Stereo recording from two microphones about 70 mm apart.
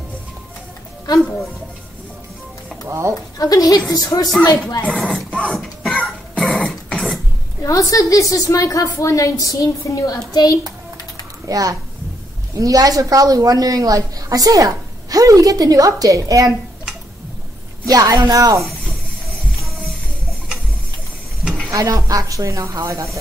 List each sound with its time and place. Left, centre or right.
2.9 s a woman's voice: right
3.3 s a woman's voice: left
5.0 s speech: centre
5.6 s cough: centre
7.6 s a woman's voice: left
11.4 s a woman's voice: right
17.8 s a woman's voice: right
21.7 s a woman's voice: right